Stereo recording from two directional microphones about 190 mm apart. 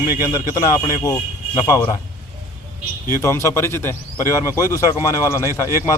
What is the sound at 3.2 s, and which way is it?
A man's voice, 15° left (ahead or behind).